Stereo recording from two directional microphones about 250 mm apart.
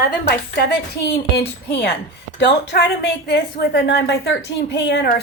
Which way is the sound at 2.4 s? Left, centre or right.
Left.